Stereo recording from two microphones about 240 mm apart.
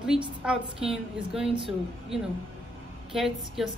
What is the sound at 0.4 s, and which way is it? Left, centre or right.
Speech, centre.